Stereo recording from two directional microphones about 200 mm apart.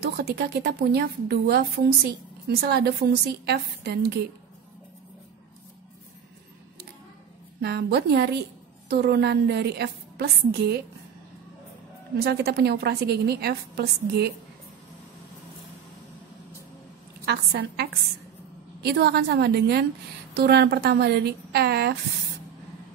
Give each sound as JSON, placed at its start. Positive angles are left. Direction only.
{"t": 0.0, "sound": "a woman's voice", "side_deg": -55}
{"t": 7.6, "sound": "a woman's voice", "side_deg": -55}
{"t": 12.2, "sound": "a woman's voice", "side_deg": -50}
{"t": 17.2, "sound": "a woman's voice", "side_deg": -50}